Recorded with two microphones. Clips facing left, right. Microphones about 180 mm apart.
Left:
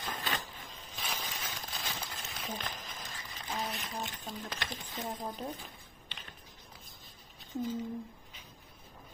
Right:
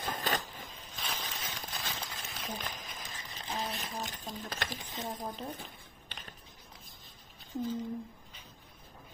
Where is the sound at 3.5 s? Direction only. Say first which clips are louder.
Even; 25° right (ahead or behind).